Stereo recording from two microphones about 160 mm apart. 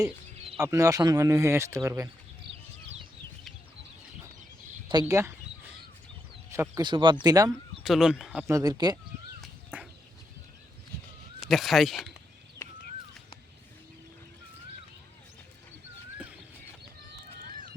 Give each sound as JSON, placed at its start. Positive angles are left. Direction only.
{"t": 0.6, "sound": "speech", "side_deg": -20}
{"t": 4.9, "sound": "speech", "side_deg": -25}
{"t": 6.5, "sound": "speech", "side_deg": -15}
{"t": 6.8, "sound": "speech", "side_deg": -30}
{"t": 7.5, "sound": "speech", "side_deg": 0}
{"t": 8.4, "sound": "speech", "side_deg": -20}
{"t": 9.7, "sound": "a sound", "side_deg": -10}
{"t": 11.4, "sound": "speech", "side_deg": 0}
{"t": 12.6, "sound": "a sound", "side_deg": 15}